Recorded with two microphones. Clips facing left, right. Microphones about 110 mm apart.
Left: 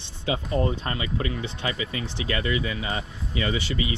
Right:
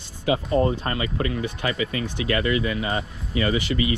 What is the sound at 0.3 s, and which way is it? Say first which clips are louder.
Speech: right 4 dB; 35° right (ahead or behind).